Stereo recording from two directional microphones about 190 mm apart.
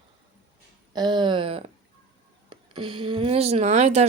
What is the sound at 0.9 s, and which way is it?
Speech, 25° right (ahead or behind).